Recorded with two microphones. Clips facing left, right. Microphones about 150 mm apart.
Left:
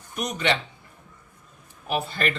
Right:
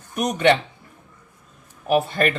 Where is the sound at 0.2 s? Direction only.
50° right (ahead or behind).